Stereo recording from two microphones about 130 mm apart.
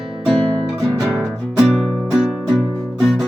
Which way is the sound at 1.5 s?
10° right (ahead or behind).